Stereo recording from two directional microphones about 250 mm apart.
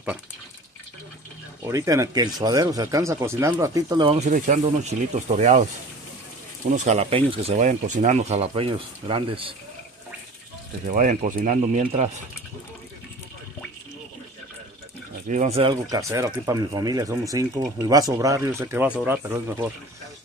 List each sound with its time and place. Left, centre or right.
1.7 s speech: centre
4.3 s speech: right
6.7 s speech: right
10.9 s speech: right
15.2 s speech: right; by 19.7 s centre